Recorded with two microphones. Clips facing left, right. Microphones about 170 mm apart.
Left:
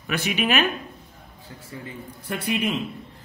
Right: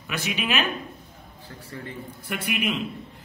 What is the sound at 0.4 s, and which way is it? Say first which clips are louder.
Speech: left 4 dB; 55° left (ahead or behind).